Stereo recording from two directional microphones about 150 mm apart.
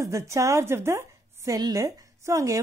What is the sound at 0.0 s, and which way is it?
A woman's voice, 20° right (ahead or behind).